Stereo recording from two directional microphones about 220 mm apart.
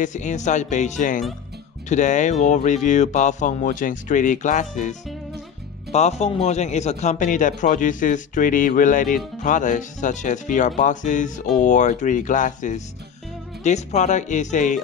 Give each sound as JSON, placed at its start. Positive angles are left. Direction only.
{"t": 0.0, "sound": "speech", "side_deg": 35}